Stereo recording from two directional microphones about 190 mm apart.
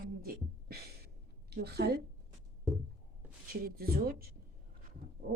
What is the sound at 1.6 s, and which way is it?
Speech, 60° right (ahead or behind).